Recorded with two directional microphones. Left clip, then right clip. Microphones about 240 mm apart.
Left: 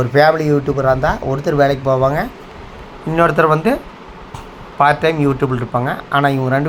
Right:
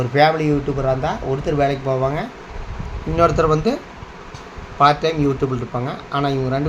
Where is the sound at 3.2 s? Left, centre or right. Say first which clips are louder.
Left 3 dB; centre.